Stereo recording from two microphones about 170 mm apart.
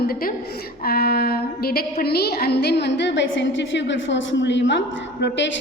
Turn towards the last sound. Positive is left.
turn(degrees=90)